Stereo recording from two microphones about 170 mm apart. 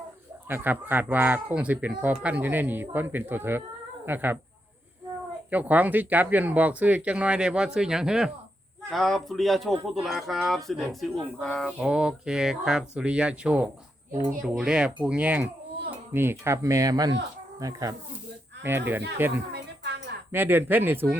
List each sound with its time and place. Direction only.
0.4 s speech: 10° right (ahead or behind)
5.5 s speech: 10° right (ahead or behind)
19.5 s a sound: 75° right (ahead or behind)
20.3 s speech: 10° right (ahead or behind)